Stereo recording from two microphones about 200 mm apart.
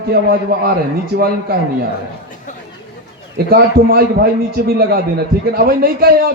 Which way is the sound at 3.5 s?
50° right (ahead or behind).